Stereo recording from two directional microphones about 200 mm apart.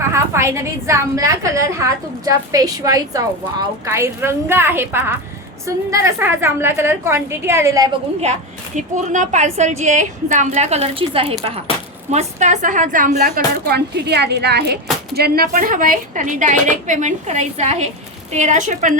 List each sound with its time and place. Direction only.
0.1 s a woman's voice: 15° right (ahead or behind)
8.2 s a woman's voice: 35° right (ahead or behind)